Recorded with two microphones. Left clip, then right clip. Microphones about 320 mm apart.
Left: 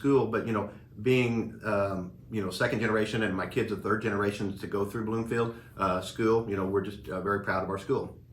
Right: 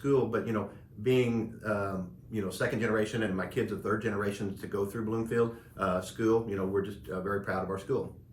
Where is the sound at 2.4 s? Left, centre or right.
Centre.